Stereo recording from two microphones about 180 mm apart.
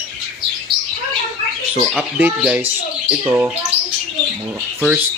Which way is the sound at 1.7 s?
5° right (ahead or behind).